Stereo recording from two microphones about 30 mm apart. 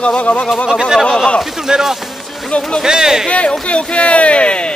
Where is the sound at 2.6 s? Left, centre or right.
Left.